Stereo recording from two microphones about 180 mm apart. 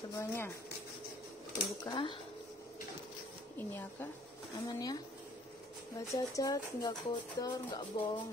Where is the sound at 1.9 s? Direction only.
25° left (ahead or behind).